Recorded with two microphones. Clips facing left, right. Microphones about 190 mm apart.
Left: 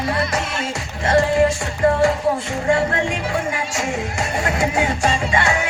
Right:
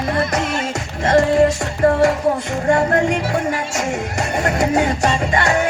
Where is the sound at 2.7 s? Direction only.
40° right (ahead or behind).